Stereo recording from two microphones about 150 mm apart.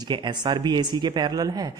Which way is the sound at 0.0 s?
30° right (ahead or behind).